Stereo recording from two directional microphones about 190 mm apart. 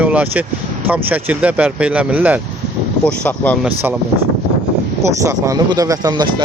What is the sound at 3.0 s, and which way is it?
Speech, 5° left (ahead or behind).